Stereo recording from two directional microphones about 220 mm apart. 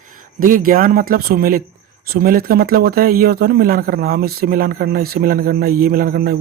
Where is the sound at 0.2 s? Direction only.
40° right (ahead or behind).